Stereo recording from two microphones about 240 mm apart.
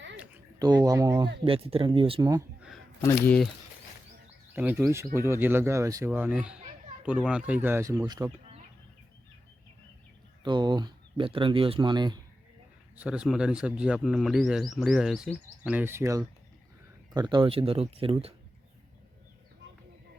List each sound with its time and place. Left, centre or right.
0.6 s speech: centre
1.5 s speech: right
2.6 s a sound: centre
3.2 s speech: centre
4.5 s speech: centre
10.4 s speech: centre
13.0 s speech: centre; by 18.3 s right